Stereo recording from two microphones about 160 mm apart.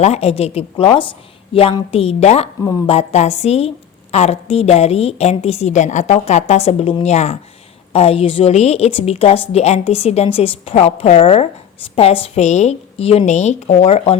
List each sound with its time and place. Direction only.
0.0 s a woman's voice: 40° left (ahead or behind)